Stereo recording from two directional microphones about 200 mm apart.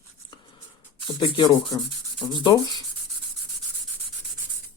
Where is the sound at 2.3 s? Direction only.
20° left (ahead or behind).